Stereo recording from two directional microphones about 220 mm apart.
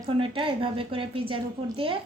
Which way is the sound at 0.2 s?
25° right (ahead or behind).